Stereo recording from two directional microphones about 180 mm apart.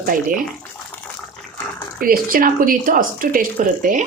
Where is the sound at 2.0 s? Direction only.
55° right (ahead or behind).